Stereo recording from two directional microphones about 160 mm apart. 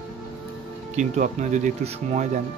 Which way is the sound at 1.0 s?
50° right (ahead or behind).